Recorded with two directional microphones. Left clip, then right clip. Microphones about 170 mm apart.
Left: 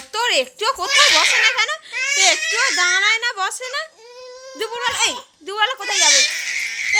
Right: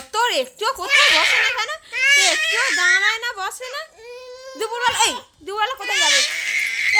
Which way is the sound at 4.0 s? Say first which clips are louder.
Right 1 dB; 15° right (ahead or behind).